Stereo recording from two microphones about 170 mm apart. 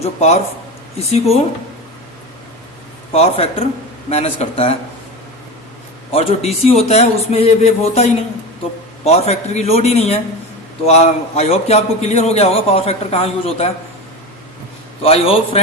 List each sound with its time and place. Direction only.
0.0 s a man's voice: 40° left (ahead or behind)
3.1 s a man's voice: 35° left (ahead or behind)
6.1 s a man's voice: 35° left (ahead or behind)
15.0 s a man's voice: 35° left (ahead or behind)